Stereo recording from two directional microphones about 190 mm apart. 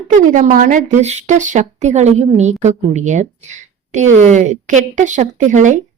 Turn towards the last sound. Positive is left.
turn(degrees=-40)  # may be behind; listen again after turning